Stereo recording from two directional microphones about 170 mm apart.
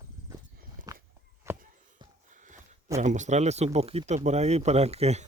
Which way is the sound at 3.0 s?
45° right (ahead or behind).